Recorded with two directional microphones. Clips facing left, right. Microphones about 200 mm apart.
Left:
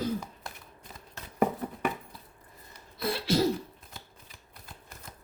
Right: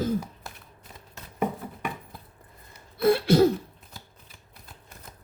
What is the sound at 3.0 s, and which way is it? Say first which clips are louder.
Throat clearing: right 8 dB; 55° right (ahead or behind).